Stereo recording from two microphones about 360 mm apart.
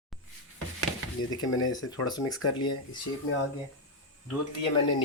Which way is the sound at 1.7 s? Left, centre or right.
Centre.